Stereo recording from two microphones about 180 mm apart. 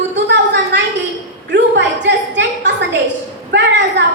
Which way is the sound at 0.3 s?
80° right.